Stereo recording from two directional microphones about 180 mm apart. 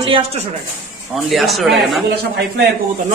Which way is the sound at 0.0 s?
30° right (ahead or behind).